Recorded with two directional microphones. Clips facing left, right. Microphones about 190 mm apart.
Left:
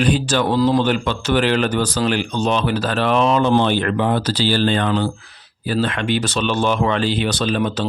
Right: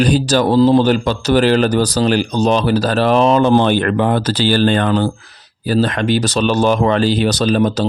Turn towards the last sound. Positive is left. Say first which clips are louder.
# right 5 dB
turn(degrees=-40)  # may be behind; listen again after turning